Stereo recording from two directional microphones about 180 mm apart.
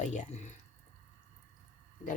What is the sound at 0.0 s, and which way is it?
Speech, 40° left (ahead or behind).